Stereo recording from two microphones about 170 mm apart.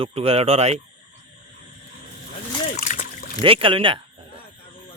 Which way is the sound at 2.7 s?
50° left (ahead or behind).